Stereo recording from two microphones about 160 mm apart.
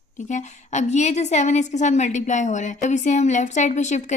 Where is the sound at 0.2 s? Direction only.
50° left (ahead or behind).